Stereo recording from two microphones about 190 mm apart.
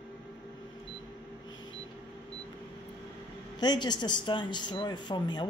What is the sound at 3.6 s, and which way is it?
Speech, 20° left (ahead or behind).